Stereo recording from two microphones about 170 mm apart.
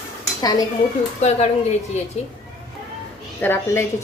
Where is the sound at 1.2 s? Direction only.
40° left (ahead or behind).